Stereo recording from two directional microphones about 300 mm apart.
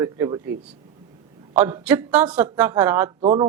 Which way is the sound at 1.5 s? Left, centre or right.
Centre.